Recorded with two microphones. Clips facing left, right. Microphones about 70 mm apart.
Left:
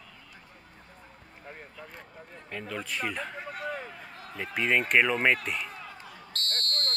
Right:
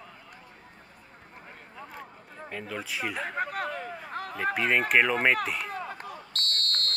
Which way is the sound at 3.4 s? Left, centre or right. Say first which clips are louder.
Right 4 dB; right.